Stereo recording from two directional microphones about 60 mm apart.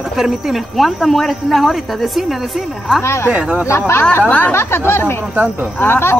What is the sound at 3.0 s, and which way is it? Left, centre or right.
Speech, left.